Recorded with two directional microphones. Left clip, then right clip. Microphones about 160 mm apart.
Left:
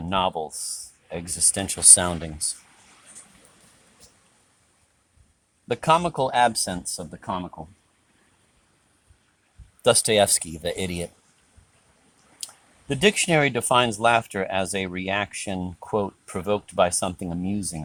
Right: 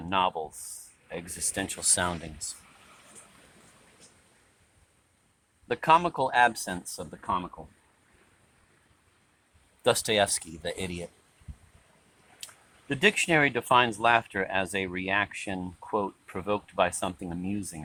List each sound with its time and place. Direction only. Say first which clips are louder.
0.1 s speech: left 3 dB; 50° left (ahead or behind)
1.6 s speech: left 7 dB; 65° left (ahead or behind)
5.6 s speech: left 2 dB; 55° left (ahead or behind)
9.8 s speech: left 6 dB; 60° left (ahead or behind)
12.9 s speech: left 3 dB; 60° left (ahead or behind)